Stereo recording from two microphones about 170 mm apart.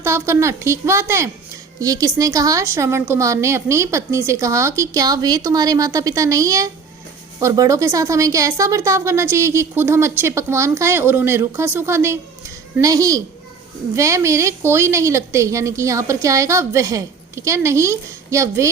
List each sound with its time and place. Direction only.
0.0 s a woman's voice: 15° right (ahead or behind)